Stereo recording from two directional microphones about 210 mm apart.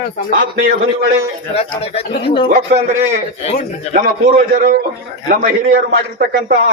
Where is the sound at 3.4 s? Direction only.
30° left (ahead or behind).